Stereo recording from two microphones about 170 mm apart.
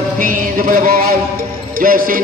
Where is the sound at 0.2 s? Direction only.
55° right (ahead or behind).